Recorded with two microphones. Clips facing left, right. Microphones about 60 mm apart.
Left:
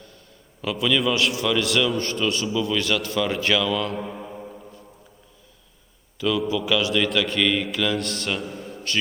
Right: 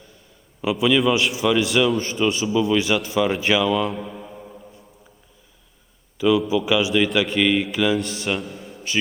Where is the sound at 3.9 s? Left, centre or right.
Centre.